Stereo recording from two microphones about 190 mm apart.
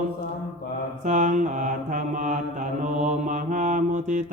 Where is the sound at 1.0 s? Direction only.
40° right (ahead or behind).